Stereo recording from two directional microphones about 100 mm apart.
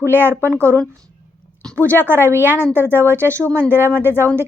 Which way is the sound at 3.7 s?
20° right (ahead or behind).